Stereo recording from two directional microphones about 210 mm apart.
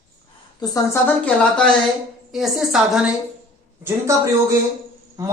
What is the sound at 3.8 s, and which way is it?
Speech, 15° right (ahead or behind).